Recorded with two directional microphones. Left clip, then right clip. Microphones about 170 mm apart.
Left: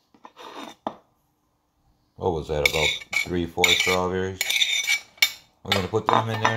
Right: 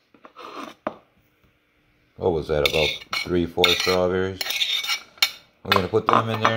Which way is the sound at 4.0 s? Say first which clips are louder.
Right 4 dB; 15° left (ahead or behind).